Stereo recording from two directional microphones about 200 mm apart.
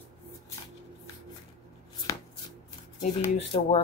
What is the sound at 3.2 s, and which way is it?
Speech, 30° left (ahead or behind).